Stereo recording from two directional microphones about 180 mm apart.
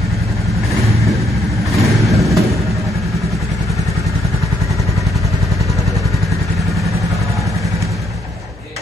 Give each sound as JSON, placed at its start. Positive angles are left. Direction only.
{"t": 2.0, "sound": "vehicle", "side_deg": 0}